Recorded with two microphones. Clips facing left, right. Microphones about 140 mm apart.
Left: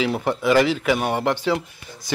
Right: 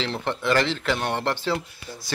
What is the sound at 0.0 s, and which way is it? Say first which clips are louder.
A man's voice: left 5 dB; 10° left (ahead or behind).